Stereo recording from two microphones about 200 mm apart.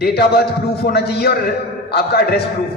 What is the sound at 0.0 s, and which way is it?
A man's voice, 50° left (ahead or behind).